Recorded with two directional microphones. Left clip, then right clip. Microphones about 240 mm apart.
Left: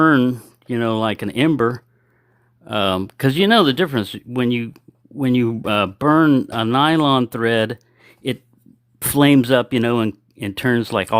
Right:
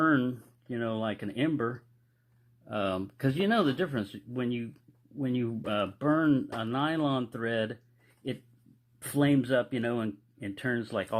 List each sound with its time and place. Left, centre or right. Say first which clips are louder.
0.0 s speech: left 12 dB; left
9.0 s speech: left 13 dB; left